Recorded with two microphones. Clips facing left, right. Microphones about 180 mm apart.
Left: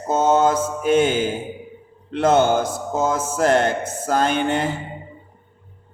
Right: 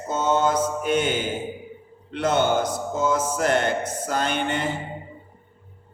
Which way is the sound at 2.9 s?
50° left (ahead or behind).